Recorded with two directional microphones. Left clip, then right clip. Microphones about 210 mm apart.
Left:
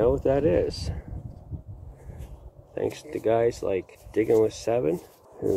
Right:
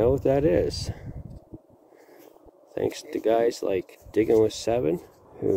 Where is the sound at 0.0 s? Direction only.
25° right (ahead or behind).